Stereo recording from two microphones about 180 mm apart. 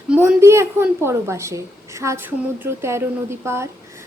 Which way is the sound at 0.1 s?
10° right (ahead or behind).